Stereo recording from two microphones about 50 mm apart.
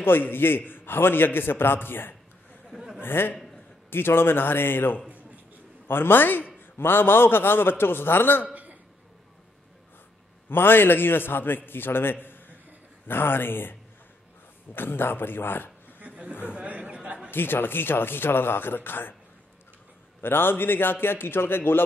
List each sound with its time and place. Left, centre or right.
0.0 s a man's voice: left
10.5 s a man's voice: left
16.0 s a sound: right
17.3 s a man's voice: left
20.2 s a man's voice: left